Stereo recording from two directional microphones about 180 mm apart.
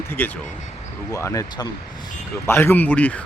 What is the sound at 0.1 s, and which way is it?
Speech, 10° left (ahead or behind).